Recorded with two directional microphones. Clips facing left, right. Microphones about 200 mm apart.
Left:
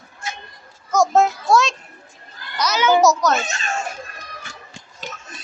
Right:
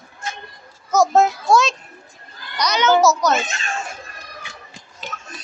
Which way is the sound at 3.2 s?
Centre (ahead or behind).